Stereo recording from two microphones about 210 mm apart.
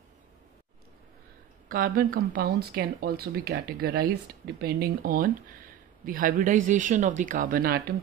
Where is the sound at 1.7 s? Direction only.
45° right (ahead or behind).